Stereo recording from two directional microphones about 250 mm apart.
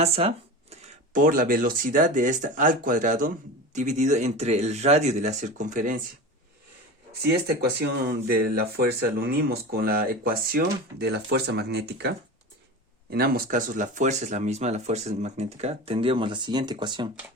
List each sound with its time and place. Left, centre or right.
0.0 s speech: right
8.0 s speech: right; by 17.1 s centre